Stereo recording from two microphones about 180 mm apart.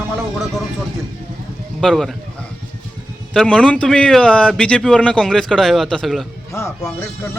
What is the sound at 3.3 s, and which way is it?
A man's voice, 5° left (ahead or behind).